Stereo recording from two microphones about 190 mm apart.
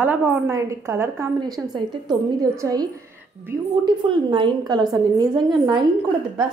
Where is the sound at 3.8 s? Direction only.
25° right (ahead or behind).